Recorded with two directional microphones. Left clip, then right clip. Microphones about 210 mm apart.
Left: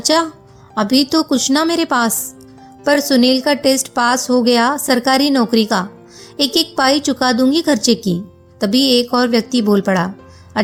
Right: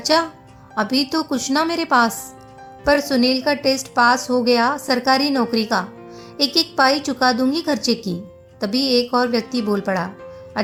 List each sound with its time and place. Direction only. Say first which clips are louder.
0.0 s a woman's voice: left 3 dB; 40° left (ahead or behind)